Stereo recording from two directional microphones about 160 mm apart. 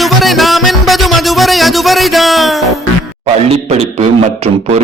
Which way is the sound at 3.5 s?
40° right (ahead or behind).